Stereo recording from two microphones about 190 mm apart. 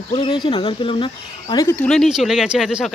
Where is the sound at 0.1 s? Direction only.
25° left (ahead or behind).